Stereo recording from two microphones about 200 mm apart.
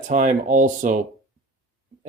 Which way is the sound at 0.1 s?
40° right (ahead or behind).